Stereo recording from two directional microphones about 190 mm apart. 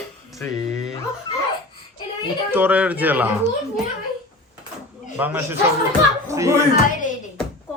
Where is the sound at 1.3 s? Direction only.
25° left (ahead or behind).